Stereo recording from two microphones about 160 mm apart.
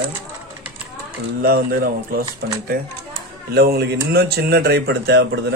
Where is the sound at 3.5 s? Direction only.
80° right.